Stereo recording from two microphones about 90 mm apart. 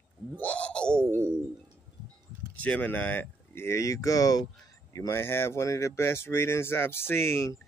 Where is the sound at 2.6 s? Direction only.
15° left (ahead or behind); by 4.4 s 45° left (ahead or behind).